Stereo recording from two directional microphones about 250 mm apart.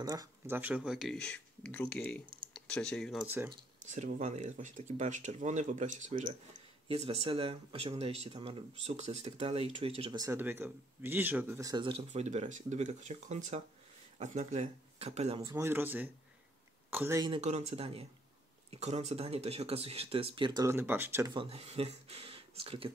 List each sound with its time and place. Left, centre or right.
0.0 s speech: centre
3.9 s speech: right
15.4 s speech: centre
17.4 s speech: right